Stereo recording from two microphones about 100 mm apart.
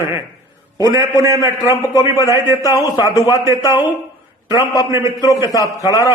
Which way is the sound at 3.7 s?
20° right (ahead or behind).